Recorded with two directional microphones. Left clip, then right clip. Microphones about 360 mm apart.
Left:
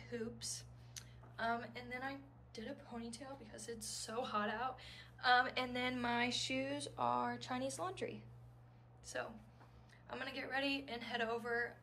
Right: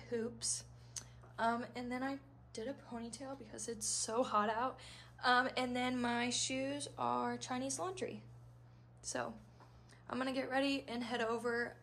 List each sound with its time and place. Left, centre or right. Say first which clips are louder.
0.0 s speech: right 5 dB; centre
9.0 s a woman's voice: right 3 dB; right